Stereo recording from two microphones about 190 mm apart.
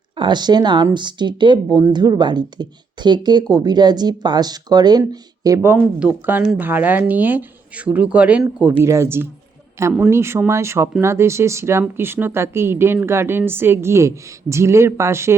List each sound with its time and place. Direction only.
0.2 s speech: 25° right (ahead or behind)